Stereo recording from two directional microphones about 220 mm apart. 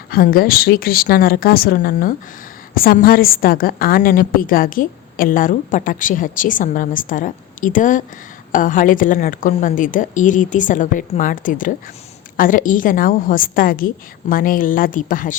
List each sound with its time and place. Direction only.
0.1 s a woman's voice: 40° left (ahead or behind)